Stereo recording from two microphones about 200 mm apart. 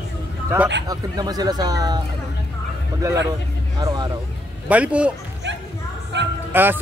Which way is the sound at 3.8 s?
20° right (ahead or behind).